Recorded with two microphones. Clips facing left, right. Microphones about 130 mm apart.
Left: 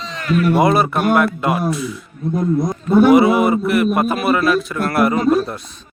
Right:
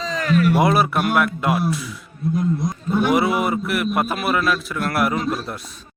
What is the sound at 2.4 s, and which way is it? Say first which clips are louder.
Speech: left 8 dB; 45° left (ahead or behind).